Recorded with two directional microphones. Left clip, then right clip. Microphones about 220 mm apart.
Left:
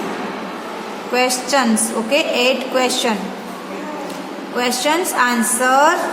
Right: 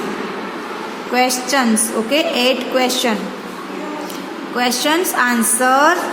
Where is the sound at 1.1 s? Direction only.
10° right (ahead or behind).